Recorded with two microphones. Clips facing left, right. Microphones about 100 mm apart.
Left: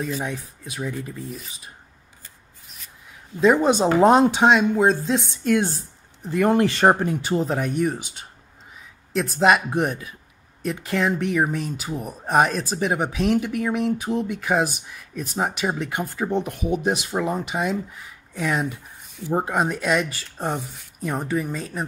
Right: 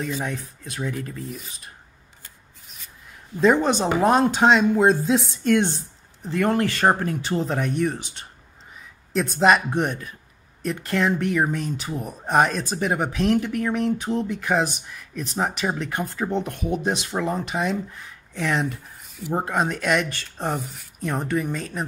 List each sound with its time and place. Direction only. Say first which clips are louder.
0.0 s speech: even; 5° left (ahead or behind)
3.3 s speech: left 1 dB; centre (ahead or behind)
4.0 s speech: left 4 dB; 20° left (ahead or behind)
4.4 s speech: even; 5° left (ahead or behind)
4.8 s speech: right 1 dB; 5° right (ahead or behind)
6.4 s speech: left 3 dB; 20° left (ahead or behind); by 21.8 s 5° left (ahead or behind)